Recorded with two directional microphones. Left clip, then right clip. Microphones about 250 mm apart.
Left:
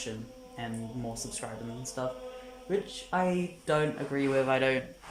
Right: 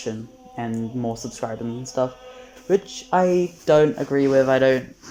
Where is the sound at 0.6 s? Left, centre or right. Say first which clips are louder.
Right 11 dB; right.